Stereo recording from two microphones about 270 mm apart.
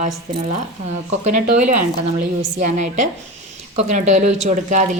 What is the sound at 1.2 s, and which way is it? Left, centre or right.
Speech, right.